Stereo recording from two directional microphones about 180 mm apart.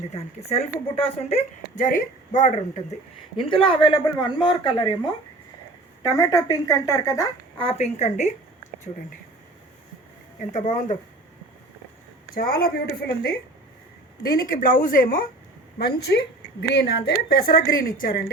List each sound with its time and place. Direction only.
0.1 s speech: 35° left (ahead or behind)
3.3 s a woman's voice: 30° left (ahead or behind)
6.0 s a woman's voice: 20° left (ahead or behind)
7.6 s speech: 35° left (ahead or behind)
10.5 s speech: 40° left (ahead or behind)
12.3 s a woman's voice: 55° left (ahead or behind)
16.1 s a woman's voice: 70° left (ahead or behind); by 18.3 s 50° left (ahead or behind)